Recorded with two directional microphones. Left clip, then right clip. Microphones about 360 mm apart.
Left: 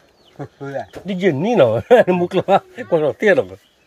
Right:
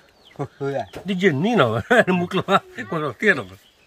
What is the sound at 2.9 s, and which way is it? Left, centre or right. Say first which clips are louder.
Speech: left 6 dB; centre.